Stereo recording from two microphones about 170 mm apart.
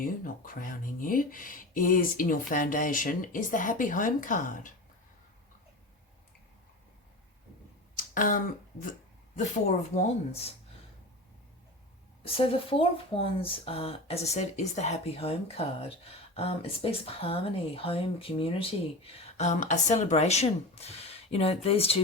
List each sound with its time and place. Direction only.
0.0 s speech: 55° left (ahead or behind)
7.9 s finger snapping: 50° left (ahead or behind)
9.3 s speech: 40° left (ahead or behind)
12.2 s speech: 35° left (ahead or behind)